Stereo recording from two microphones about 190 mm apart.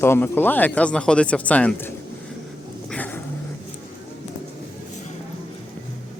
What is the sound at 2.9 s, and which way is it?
Dog, 10° left (ahead or behind).